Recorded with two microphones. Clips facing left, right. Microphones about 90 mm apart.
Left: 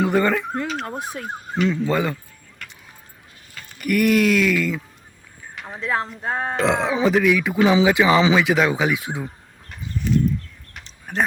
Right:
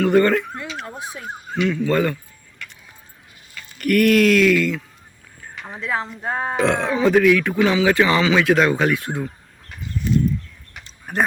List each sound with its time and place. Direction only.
0.1 s speech: 5° left (ahead or behind)
0.5 s speech: 45° left (ahead or behind)
1.9 s speech: 5° left (ahead or behind)
2.6 s music: 40° left (ahead or behind)
3.8 s speech: 5° left (ahead or behind)
5.5 s a sound: centre (ahead or behind)
6.2 s speech: 5° right (ahead or behind); by 8.4 s 15° left (ahead or behind)
8.4 s speech: 5° left (ahead or behind)
10.8 s a sound: 5° right (ahead or behind)